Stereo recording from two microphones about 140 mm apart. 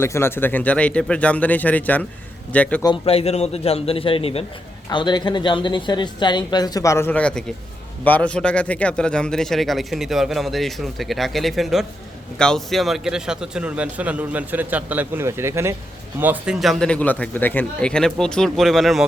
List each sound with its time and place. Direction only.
0.0 s speech: 20° left (ahead or behind)
2.8 s a man's voice: 35° left (ahead or behind)
4.9 s a woman's voice: 30° left (ahead or behind)
7.1 s a man's voice: 10° left (ahead or behind); by 16.6 s 10° right (ahead or behind)
16.6 s a man's voice: 5° left (ahead or behind)